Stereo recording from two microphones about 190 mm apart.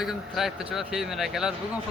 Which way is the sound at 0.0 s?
Centre (ahead or behind).